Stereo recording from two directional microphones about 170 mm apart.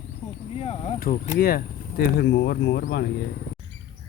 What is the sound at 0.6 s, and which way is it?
Speech, 35° left (ahead or behind).